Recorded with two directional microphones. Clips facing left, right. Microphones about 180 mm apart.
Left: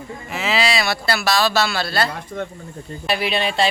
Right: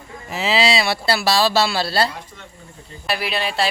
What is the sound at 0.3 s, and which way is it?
Speech, 35° right (ahead or behind).